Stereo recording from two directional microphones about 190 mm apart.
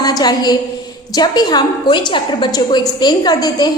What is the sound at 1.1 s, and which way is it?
A woman's voice, 20° left (ahead or behind).